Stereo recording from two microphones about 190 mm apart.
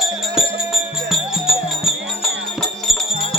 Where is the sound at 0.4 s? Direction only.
5° right (ahead or behind).